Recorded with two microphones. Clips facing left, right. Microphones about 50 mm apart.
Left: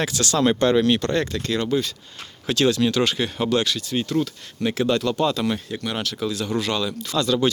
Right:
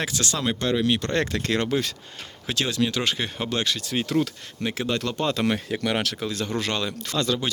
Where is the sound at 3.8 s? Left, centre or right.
Right.